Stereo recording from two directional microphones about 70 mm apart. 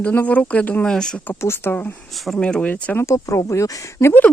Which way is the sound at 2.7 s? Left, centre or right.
Left.